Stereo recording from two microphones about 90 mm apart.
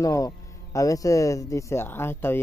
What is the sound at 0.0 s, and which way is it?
Speech, 40° left (ahead or behind).